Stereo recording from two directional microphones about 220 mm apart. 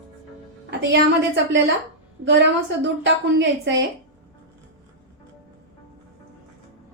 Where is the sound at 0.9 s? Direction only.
55° right (ahead or behind).